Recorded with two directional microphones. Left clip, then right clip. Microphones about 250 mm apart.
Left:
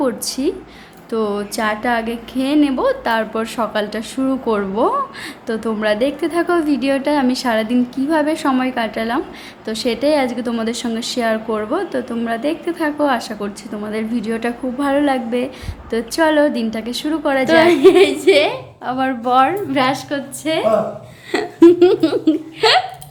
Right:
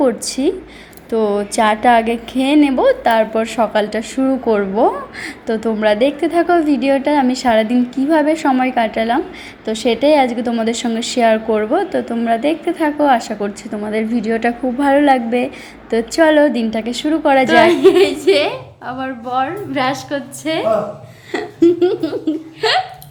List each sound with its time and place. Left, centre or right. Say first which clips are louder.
0.0 s a woman's voice: right 4 dB; centre
18.9 s a woman's voice: left 5 dB; centre
19.7 s a woman's voice: left 1 dB; centre
21.3 s speech: left 3 dB; centre